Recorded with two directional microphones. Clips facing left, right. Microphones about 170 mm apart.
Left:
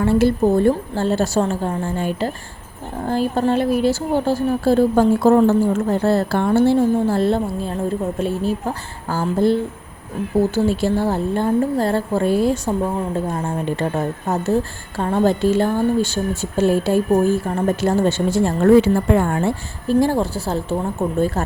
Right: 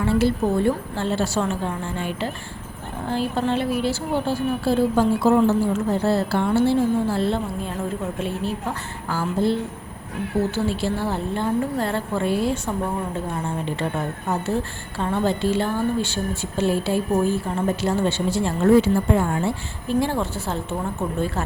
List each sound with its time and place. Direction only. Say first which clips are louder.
0.0 s speech: left 5 dB; 45° left (ahead or behind)
19.9 s speech: left 5 dB; 40° left (ahead or behind)